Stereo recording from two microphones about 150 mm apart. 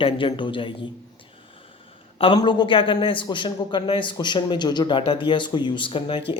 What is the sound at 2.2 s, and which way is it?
Speech, 30° left (ahead or behind).